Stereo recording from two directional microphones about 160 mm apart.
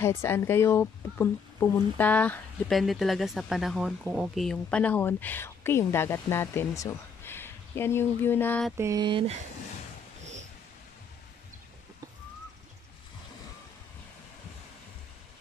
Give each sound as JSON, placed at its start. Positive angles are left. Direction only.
{"t": 0.0, "sound": "speech", "side_deg": 15}
{"t": 2.8, "sound": "speech", "side_deg": 0}
{"t": 8.7, "sound": "mantra", "side_deg": -15}